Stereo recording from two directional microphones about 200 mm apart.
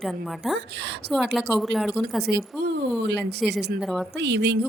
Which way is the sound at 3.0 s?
60° right (ahead or behind).